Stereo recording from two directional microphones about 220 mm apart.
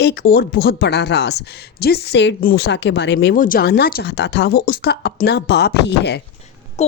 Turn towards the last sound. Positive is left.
turn(degrees=30)  # may be behind; listen again after turning